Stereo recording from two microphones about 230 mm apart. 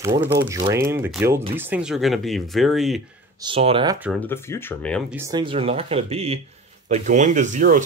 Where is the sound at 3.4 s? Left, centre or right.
Right.